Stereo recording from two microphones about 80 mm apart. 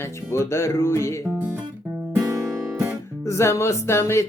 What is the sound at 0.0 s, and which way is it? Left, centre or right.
Music, left.